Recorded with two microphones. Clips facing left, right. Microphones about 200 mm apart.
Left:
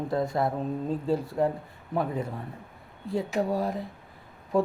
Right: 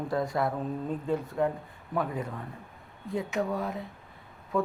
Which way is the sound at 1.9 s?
25° left (ahead or behind).